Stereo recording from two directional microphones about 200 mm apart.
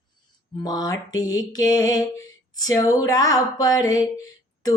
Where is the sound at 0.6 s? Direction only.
20° left (ahead or behind).